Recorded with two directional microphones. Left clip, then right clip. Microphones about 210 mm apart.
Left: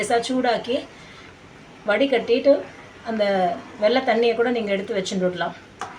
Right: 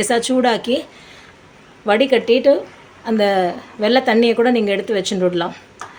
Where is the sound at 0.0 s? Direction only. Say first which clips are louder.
Right 5 dB; 50° right (ahead or behind).